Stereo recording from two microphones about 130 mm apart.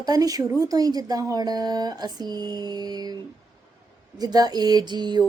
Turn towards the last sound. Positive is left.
turn(degrees=-35)  # may be behind; listen again after turning